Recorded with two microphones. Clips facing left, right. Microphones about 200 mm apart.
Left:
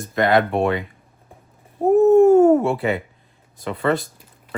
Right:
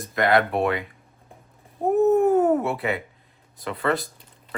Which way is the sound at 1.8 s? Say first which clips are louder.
Left 6 dB; 30° left (ahead or behind).